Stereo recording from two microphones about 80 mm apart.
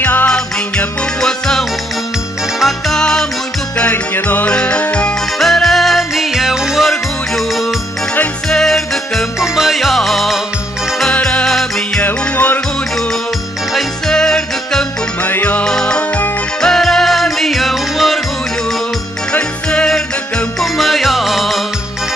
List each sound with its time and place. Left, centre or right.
0.0 s music: left
0.3 s music: centre
3.9 s music: left
4.5 s music: centre
5.4 s music: centre
12.0 s music: left
13.7 s music: centre
15.2 s music: left
15.6 s music: centre
19.3 s music: centre
20.7 s music: centre